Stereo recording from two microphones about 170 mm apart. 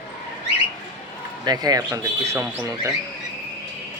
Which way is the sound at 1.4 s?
20° right (ahead or behind).